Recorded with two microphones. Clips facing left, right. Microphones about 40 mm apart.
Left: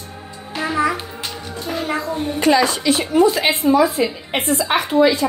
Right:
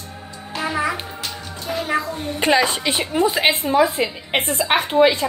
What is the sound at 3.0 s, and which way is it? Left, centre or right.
Speech, centre.